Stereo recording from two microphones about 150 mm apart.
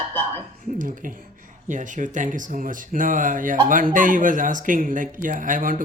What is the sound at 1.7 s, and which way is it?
Speech, 55° right (ahead or behind).